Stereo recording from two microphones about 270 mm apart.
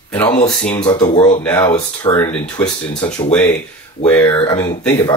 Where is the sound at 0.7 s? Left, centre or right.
Centre.